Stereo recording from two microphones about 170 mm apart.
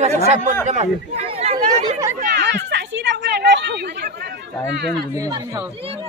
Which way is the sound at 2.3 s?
90° right.